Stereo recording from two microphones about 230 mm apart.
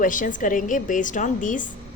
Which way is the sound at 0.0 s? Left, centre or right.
Left.